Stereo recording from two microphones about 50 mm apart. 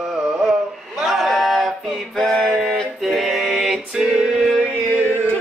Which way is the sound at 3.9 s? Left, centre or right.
Centre.